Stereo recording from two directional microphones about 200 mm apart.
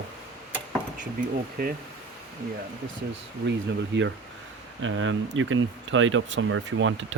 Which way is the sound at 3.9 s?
65° right (ahead or behind).